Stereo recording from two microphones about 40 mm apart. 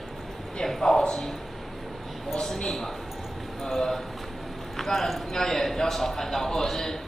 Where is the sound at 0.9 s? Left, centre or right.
Centre.